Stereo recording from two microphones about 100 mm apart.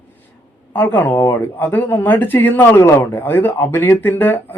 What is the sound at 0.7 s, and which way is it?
Speech, 20° left (ahead or behind).